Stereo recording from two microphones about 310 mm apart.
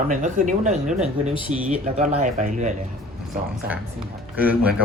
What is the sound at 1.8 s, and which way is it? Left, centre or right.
Speech, right.